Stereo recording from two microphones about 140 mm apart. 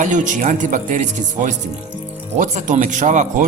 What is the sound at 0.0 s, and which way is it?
Speech, 65° right (ahead or behind).